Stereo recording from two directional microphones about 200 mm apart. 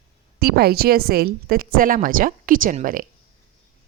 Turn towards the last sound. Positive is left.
turn(degrees=-40)  # may be behind; listen again after turning